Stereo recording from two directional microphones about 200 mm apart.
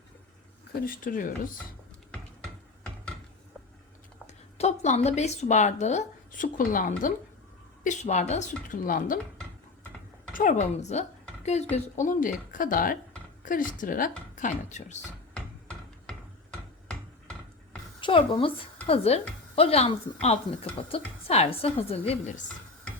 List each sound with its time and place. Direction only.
0.7 s speech: 45° left (ahead or behind)
2.1 s a sound: 5° left (ahead or behind)
4.5 s speech: 35° left (ahead or behind)
10.3 s speech: 40° left (ahead or behind)
18.0 s a woman's voice: 25° left (ahead or behind)